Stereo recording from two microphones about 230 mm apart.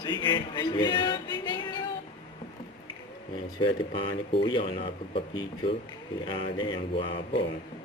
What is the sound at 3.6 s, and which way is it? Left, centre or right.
Speech, left.